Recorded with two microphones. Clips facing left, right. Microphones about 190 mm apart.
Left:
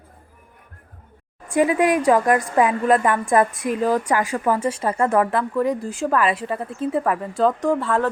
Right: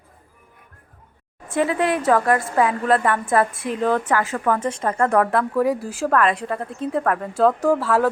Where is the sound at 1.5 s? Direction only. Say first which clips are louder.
Left 3 dB; 15° left (ahead or behind).